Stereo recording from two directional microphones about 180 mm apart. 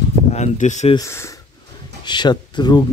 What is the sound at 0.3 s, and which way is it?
Speech, 40° left (ahead or behind).